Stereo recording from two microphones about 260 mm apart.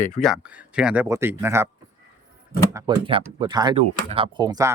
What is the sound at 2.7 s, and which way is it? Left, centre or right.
Speech, centre.